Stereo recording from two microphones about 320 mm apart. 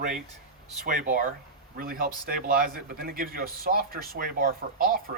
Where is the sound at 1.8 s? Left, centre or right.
Right.